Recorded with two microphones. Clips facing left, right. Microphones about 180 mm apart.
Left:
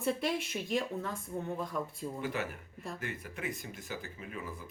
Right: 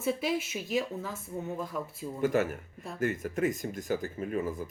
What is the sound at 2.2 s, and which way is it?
Speech, 45° right (ahead or behind).